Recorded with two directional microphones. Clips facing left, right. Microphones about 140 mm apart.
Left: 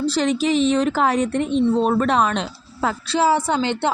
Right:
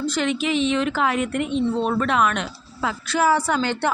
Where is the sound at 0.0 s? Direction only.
35° left (ahead or behind).